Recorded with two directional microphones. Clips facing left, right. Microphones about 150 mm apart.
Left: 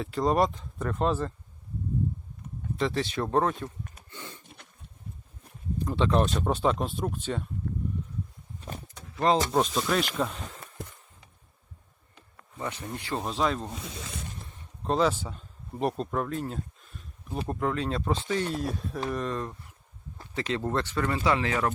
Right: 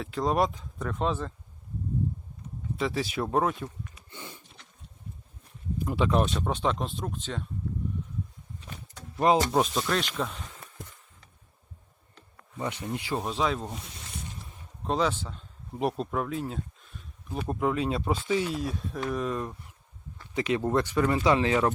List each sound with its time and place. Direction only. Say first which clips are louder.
0.0 s speech: left 1 dB; centre (ahead or behind)
2.7 s speech: left 1 dB; 5° right (ahead or behind)
4.1 s wheeze: even; 15° right (ahead or behind)
5.8 s speech: left 1 dB; 10° right (ahead or behind); by 7.4 s 5° left (ahead or behind)
9.2 s speech: right 1 dB; 10° right (ahead or behind)
12.5 s speech: right 3 dB; 20° right (ahead or behind); by 13.7 s centre (ahead or behind)
14.8 s a man's voice: left 2 dB; centre (ahead or behind)
15.8 s speech: even; 5° right (ahead or behind)
17.5 s speech: right 2 dB; 10° right (ahead or behind)